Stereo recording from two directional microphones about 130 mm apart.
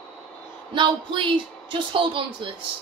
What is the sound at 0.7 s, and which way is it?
Speech, 40° right (ahead or behind).